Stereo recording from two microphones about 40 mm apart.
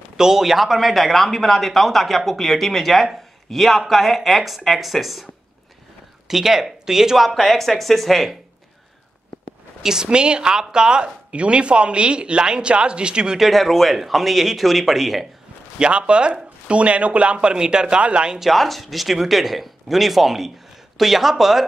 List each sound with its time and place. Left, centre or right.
0.2 s speech: centre
7.3 s speech: centre
10.0 s speech: right
13.4 s speech: centre
15.8 s speech: right
18.4 s speech: centre